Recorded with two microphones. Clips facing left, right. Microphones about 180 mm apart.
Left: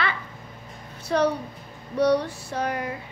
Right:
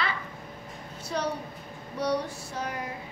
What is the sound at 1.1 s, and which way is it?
Female singing, 75° left (ahead or behind).